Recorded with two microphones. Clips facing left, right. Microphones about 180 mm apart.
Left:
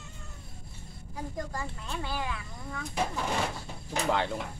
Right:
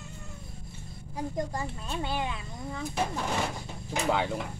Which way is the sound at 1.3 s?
20° right (ahead or behind).